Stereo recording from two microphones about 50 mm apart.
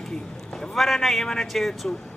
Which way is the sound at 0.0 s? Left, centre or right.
Centre.